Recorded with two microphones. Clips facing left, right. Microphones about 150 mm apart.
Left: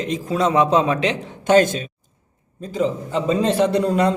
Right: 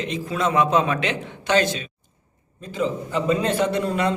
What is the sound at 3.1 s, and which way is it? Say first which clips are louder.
A man's voice: left 2 dB; 30° left (ahead or behind).